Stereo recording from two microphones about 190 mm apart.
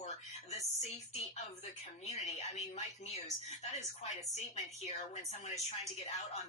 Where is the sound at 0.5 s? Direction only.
35° left (ahead or behind).